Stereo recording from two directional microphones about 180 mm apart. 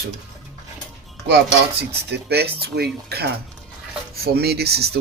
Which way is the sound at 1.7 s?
65° right (ahead or behind).